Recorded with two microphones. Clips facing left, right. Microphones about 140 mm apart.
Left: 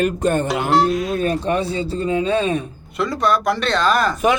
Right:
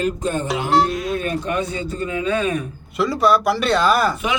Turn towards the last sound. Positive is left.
turn(degrees=-10)  # may be behind; listen again after turning